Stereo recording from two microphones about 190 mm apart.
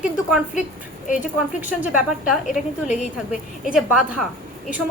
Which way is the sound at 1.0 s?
40° left (ahead or behind).